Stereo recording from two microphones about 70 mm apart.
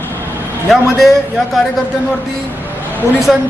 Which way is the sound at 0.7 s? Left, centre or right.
Centre.